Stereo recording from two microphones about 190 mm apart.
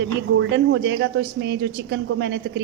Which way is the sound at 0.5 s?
70° right (ahead or behind).